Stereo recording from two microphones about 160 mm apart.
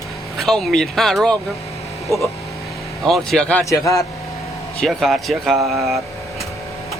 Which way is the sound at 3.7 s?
20° left (ahead or behind).